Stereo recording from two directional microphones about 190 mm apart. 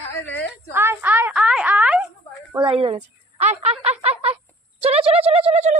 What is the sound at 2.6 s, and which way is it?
Speech, 30° right (ahead or behind).